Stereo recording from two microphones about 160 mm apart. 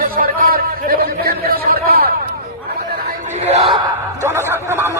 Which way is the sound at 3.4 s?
40° right (ahead or behind).